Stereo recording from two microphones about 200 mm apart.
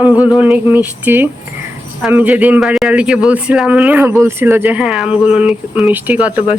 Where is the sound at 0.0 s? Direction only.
5° right (ahead or behind).